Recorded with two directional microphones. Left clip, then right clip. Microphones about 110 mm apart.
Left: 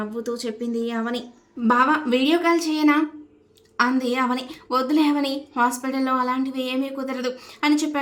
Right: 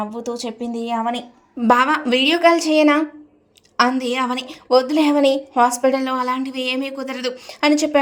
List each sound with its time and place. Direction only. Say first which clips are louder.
0.1 s speech: right 1 dB; 25° right (ahead or behind)
1.6 s a woman's voice: right 3 dB; 90° right; by 7.9 s 50° right (ahead or behind)